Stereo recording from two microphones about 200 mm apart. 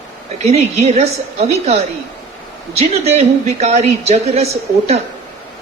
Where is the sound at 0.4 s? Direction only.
30° right (ahead or behind).